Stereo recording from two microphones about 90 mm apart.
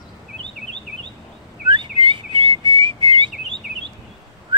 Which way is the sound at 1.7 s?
60° right (ahead or behind).